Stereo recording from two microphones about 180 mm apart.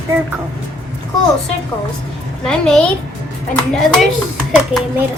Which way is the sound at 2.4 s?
5° left (ahead or behind).